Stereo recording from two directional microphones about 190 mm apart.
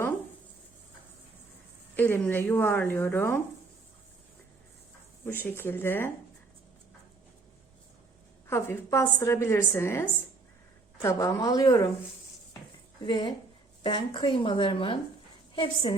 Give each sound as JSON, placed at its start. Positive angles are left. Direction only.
{"t": 2.0, "sound": "a woman's voice", "side_deg": 10}
{"t": 5.2, "sound": "a woman's voice", "side_deg": 10}
{"t": 8.4, "sound": "a woman's voice", "side_deg": 10}
{"t": 13.0, "sound": "speech", "side_deg": 25}